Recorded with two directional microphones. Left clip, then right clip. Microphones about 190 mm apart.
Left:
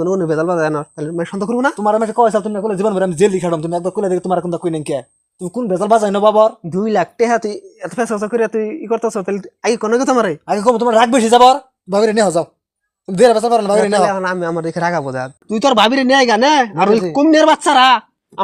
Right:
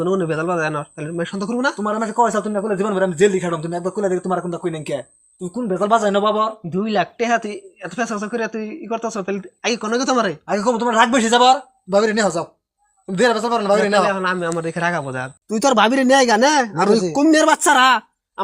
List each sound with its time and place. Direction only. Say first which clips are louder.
0.0 s speech: left 4 dB; 40° left (ahead or behind)
14.1 s speech: left 2 dB; 35° left (ahead or behind)
15.4 s speech: left 3 dB; 15° left (ahead or behind)